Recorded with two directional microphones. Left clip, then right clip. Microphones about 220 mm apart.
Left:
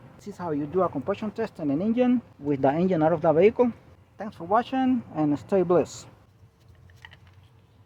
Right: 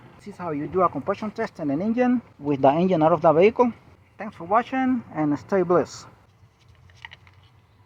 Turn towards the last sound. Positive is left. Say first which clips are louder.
# right 1 dB
turn(degrees=0)  # may be behind; listen again after turning